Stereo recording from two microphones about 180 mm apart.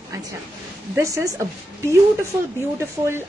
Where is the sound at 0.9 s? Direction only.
20° right (ahead or behind).